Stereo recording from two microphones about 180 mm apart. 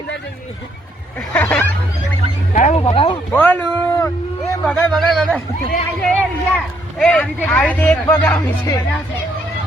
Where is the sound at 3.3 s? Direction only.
10° left (ahead or behind).